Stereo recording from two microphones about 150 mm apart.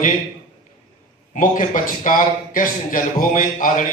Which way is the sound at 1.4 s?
60° left (ahead or behind).